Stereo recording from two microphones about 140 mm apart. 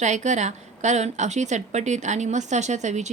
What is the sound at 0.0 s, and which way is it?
A woman's voice, 60° right (ahead or behind).